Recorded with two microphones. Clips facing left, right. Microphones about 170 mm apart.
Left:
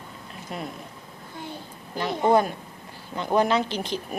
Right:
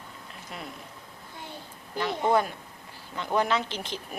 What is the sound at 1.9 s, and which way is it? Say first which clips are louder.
Speech: left 4 dB; 30° left (ahead or behind).